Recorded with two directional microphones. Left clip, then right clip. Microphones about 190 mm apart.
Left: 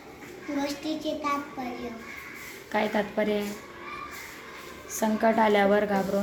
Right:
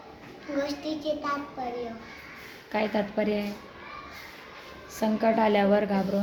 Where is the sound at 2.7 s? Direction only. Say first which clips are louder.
Left 1 dB; 15° right (ahead or behind).